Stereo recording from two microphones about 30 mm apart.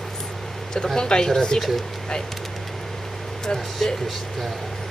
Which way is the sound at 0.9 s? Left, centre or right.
Left.